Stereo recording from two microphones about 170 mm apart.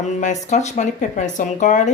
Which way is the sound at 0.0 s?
45° left (ahead or behind).